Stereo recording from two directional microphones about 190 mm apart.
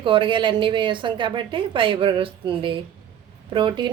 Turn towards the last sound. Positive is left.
turn(degrees=-25)  # may be behind; listen again after turning